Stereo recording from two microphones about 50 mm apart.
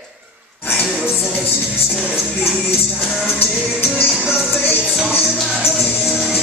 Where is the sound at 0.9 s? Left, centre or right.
Centre.